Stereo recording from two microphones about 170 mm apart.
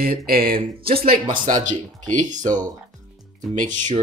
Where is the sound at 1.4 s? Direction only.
50° right (ahead or behind).